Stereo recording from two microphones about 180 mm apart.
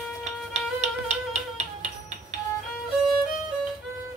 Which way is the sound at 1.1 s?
40° right (ahead or behind).